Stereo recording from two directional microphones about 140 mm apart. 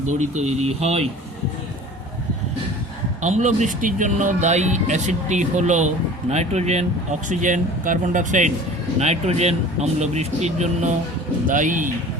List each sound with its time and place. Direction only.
0.0 s speech: 60° right (ahead or behind)
3.2 s speech: 55° right (ahead or behind)
9.0 s speech: 50° right (ahead or behind)
11.4 s speech: 65° right (ahead or behind)